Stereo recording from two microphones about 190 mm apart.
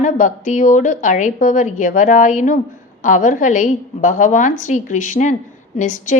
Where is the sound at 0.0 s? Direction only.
40° left (ahead or behind).